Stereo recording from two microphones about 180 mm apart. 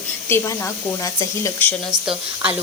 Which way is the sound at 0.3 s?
15° left (ahead or behind).